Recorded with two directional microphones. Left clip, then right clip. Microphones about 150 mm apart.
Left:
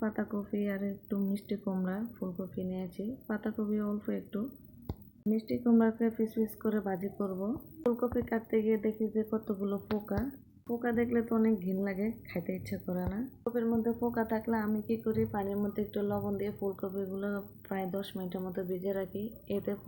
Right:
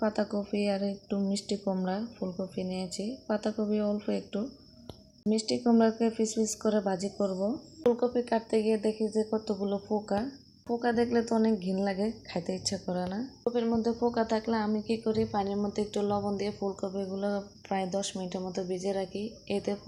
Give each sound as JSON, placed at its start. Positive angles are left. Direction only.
{"t": 0.0, "sound": "speech", "side_deg": -15}